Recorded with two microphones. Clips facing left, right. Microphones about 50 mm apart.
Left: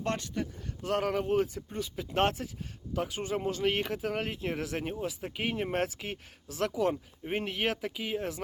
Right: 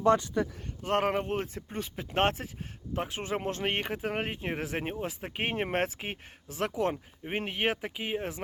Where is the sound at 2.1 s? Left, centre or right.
Right.